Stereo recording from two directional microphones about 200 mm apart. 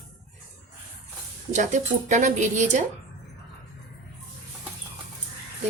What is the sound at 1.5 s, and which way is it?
A woman's voice, 40° right (ahead or behind).